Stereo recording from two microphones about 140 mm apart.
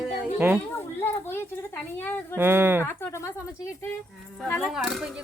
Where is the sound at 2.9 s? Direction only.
20° left (ahead or behind).